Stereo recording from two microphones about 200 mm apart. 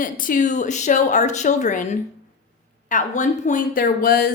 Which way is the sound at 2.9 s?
40° left (ahead or behind).